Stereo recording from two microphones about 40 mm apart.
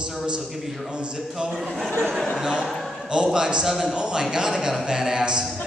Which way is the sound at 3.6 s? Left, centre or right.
Centre.